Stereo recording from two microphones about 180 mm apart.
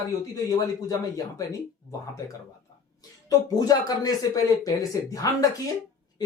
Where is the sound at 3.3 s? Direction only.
20° left (ahead or behind).